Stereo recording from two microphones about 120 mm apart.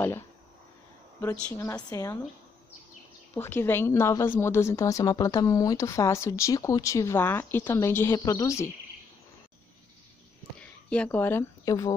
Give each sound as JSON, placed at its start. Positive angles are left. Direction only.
{"t": 1.5, "sound": "a woman's voice", "side_deg": 25}
{"t": 3.3, "sound": "a woman's voice", "side_deg": 20}
{"t": 10.6, "sound": "speech", "side_deg": 10}
{"t": 11.6, "sound": "speech", "side_deg": 30}